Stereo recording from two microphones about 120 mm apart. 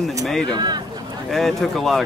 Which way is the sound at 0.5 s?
35° right (ahead or behind).